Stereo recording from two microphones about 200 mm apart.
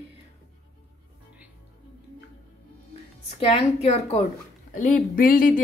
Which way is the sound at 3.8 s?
30° left (ahead or behind).